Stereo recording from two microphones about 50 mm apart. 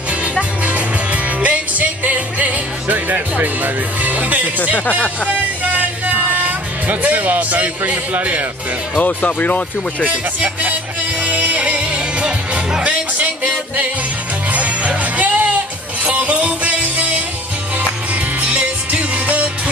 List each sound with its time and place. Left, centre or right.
0.2 s music: right
8.9 s speech: left
10.4 s music: right
18.4 s music: right